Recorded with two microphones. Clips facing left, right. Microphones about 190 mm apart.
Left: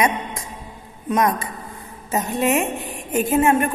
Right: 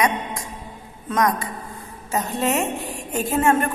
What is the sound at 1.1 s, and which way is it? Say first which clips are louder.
A woman's voice: left 1 dB; 20° left (ahead or behind).